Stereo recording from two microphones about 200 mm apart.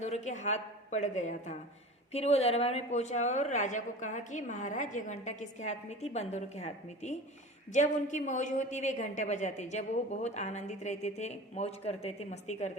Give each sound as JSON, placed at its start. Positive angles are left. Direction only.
{"t": 0.0, "sound": "a woman's voice", "side_deg": 35}